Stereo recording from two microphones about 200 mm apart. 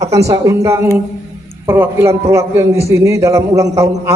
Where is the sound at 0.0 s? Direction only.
15° right (ahead or behind).